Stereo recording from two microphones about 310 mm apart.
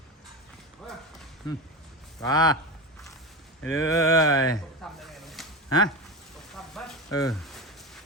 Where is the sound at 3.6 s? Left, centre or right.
Left.